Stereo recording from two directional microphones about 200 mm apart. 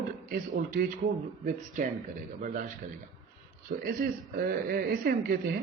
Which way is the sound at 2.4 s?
40° right (ahead or behind).